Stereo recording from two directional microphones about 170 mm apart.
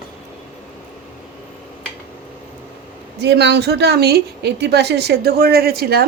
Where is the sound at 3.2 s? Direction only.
85° right; by 6.0 s 65° right (ahead or behind).